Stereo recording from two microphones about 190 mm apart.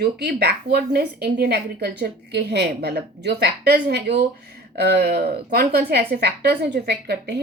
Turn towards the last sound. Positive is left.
turn(degrees=-60)  # may be behind; listen again after turning